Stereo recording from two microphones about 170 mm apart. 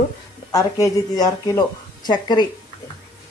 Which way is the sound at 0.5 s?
20° left (ahead or behind).